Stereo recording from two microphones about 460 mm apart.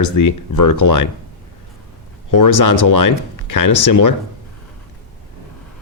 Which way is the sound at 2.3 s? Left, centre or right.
Left.